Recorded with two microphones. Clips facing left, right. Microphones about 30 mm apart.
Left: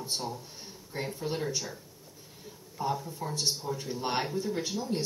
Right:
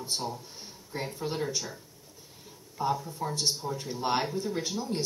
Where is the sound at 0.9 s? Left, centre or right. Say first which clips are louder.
Even; centre.